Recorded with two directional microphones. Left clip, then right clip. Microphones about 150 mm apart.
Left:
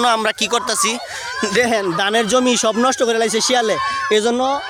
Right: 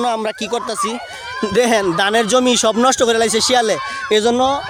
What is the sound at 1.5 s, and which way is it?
Speech, 45° right (ahead or behind).